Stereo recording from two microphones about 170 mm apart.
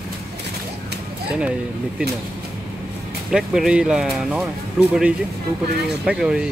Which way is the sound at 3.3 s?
5° right (ahead or behind).